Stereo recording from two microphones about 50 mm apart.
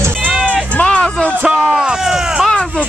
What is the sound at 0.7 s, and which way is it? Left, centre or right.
Music, centre.